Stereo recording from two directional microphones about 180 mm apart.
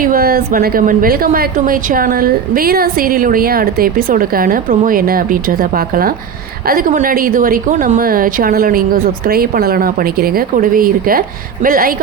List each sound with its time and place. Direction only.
0.0 s a woman's voice: 55° right (ahead or behind)